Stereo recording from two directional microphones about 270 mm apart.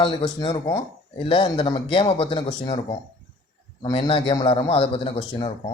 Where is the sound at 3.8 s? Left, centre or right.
Centre.